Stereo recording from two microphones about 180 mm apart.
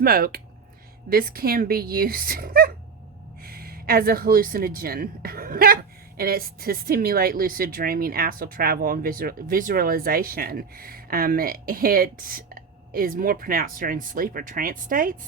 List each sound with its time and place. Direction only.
0.0 s speech: 55° right (ahead or behind)